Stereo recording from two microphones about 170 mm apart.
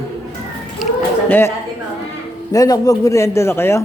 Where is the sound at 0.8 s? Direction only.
Centre (ahead or behind).